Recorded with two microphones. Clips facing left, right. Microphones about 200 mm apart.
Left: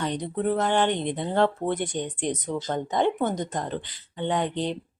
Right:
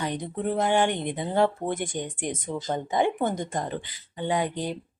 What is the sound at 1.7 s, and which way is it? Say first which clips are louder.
Speech: left 2 dB; 45° right (ahead or behind).